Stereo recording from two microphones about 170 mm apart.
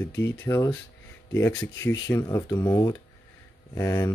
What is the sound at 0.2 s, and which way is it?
Speech, 15° left (ahead or behind).